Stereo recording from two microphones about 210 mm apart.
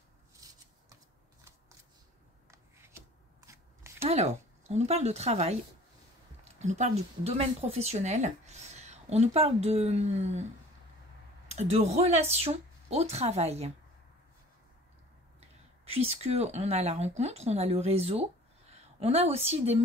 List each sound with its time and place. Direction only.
0.4 s scissors: 15° right (ahead or behind)
3.4 s scissors: 15° right (ahead or behind)
4.0 s speech: 30° right (ahead or behind)
6.6 s speech: 35° right (ahead or behind)
11.5 s speech: 30° right (ahead or behind)
15.8 s a woman's voice: 30° right (ahead or behind)